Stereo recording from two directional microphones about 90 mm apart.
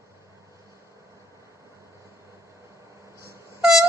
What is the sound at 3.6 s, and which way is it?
Pulse, 5° right (ahead or behind).